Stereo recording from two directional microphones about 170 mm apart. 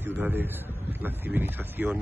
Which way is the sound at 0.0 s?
10° right (ahead or behind).